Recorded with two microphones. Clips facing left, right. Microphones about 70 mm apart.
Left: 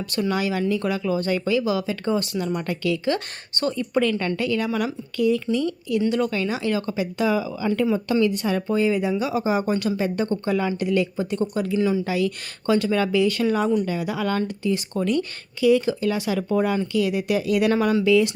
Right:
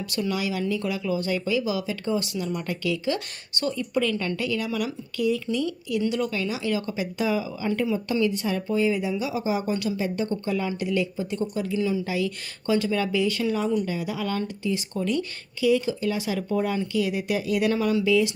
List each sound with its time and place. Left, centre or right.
0.1 s speech: left